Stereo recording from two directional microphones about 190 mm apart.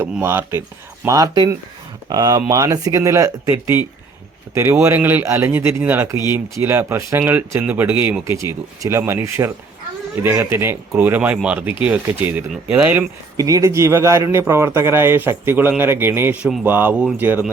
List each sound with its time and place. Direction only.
0.0 s speech: 10° right (ahead or behind)